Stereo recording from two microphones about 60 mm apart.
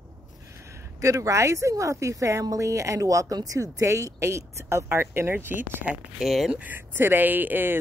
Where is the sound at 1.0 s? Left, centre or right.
Right.